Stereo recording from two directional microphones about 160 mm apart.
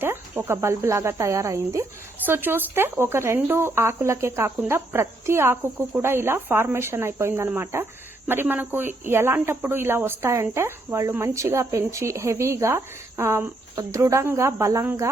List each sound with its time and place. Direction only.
0.0 s speech: 15° right (ahead or behind)